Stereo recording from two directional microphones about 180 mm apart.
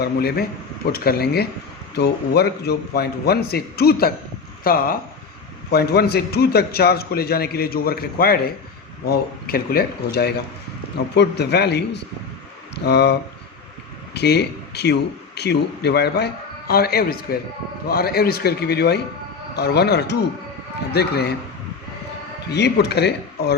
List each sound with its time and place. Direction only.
0.0 s a man's voice: 60° left (ahead or behind)
22.4 s speech: 65° left (ahead or behind)